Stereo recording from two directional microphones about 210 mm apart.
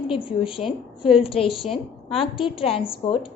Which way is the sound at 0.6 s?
Centre (ahead or behind).